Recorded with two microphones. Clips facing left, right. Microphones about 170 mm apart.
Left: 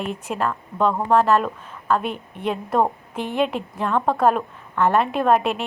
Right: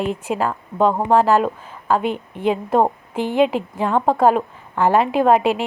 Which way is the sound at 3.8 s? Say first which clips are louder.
Right 3 dB; 30° right (ahead or behind).